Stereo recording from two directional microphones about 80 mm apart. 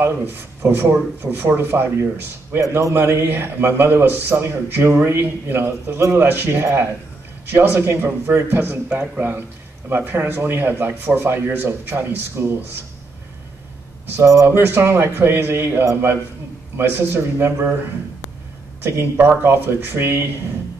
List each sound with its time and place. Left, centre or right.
0.0 s a man's voice: right
14.1 s a man's voice: right
14.6 s a man's voice: right
18.8 s a man's voice: right